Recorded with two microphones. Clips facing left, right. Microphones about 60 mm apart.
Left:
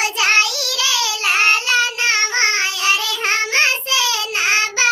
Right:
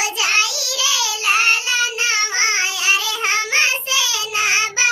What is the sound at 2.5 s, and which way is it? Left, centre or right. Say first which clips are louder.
Child singing: left 1 dB; right.